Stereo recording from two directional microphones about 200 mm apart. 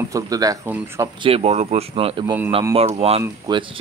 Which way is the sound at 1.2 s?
30° right (ahead or behind).